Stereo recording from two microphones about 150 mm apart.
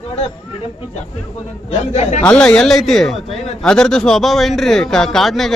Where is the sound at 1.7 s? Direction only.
45° left (ahead or behind).